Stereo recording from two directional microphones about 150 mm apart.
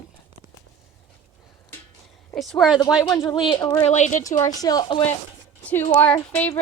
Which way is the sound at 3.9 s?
50° left (ahead or behind).